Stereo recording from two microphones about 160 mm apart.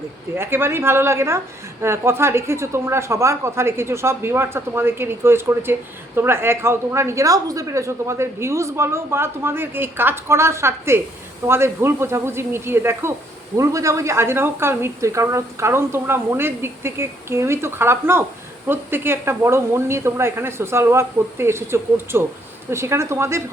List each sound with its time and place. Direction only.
0.3 s a woman's voice: 15° right (ahead or behind)